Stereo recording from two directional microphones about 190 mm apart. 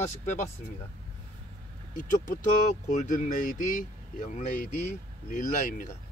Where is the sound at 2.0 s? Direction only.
40° left (ahead or behind).